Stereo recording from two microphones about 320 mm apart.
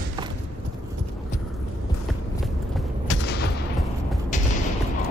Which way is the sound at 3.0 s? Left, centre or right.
Left.